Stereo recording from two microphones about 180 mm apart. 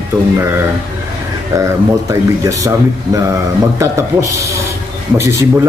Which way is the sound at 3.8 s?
15° right (ahead or behind).